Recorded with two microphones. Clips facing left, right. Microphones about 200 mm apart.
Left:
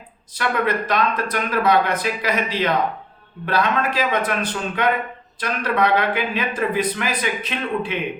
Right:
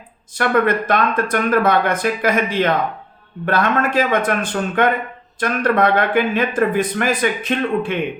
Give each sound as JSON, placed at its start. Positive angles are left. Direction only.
{"t": 0.3, "sound": "speech", "side_deg": -50}